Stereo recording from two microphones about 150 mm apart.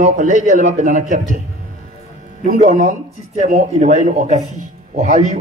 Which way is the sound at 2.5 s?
55° right (ahead or behind).